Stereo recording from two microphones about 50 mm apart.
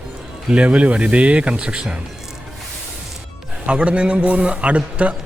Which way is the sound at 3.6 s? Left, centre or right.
Right.